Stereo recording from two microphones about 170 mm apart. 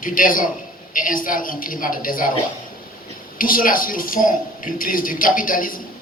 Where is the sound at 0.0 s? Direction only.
55° left (ahead or behind).